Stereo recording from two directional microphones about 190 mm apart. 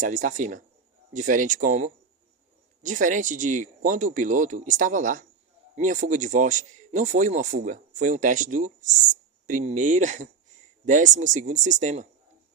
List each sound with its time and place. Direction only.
0.0 s a man's voice: 45° right (ahead or behind)